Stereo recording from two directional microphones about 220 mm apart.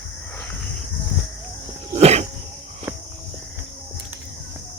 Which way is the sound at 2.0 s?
30° right (ahead or behind).